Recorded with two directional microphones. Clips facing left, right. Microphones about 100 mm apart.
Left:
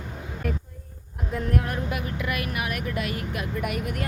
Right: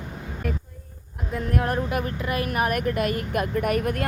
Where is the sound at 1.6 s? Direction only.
40° right (ahead or behind).